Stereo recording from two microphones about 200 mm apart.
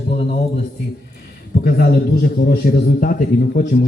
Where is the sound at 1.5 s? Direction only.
50° left (ahead or behind).